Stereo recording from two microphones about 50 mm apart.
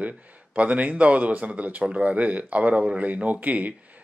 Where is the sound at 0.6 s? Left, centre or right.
Right.